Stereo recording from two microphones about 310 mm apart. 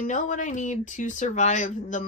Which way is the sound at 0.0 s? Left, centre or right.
Left.